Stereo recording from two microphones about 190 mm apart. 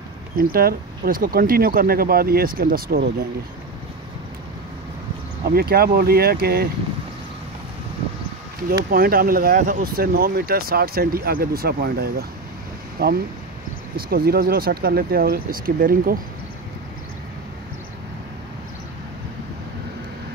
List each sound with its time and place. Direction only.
0.4 s speech: 50° right (ahead or behind)
5.5 s speech: 55° right (ahead or behind)
8.9 s speech: 50° right (ahead or behind)